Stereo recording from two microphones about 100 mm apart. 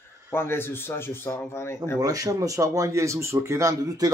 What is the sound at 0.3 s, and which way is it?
A man's voice, 25° left (ahead or behind).